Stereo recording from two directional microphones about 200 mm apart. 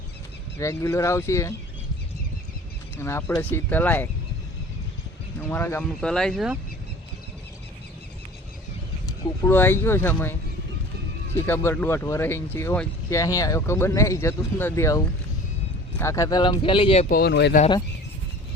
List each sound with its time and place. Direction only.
0.6 s speech: 15° left (ahead or behind)
3.0 s speech: 10° left (ahead or behind)
5.4 s speech: 10° left (ahead or behind)
9.4 s speech: 10° left (ahead or behind)
11.4 s speech: 10° left (ahead or behind); by 17.1 s 30° left (ahead or behind)
17.1 s speech: 50° left (ahead or behind)